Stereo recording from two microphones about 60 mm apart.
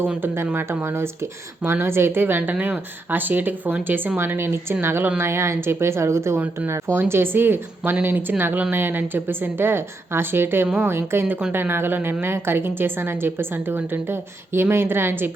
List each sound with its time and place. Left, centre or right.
0.5 s a woman's voice: right
7.1 s a woman's voice: right